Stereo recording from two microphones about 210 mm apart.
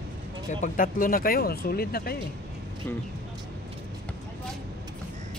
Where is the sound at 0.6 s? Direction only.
40° left (ahead or behind).